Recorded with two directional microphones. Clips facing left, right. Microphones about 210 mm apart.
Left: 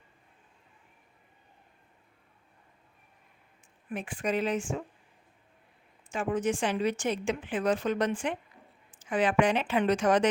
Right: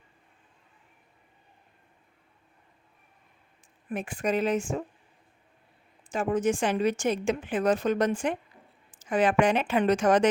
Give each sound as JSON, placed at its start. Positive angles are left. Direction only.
{"t": 3.8, "sound": "a woman's voice", "side_deg": -45}
{"t": 6.1, "sound": "a woman's voice", "side_deg": -40}